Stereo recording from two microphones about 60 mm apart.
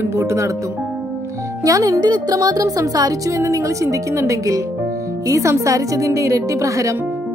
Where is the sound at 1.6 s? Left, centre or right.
Right.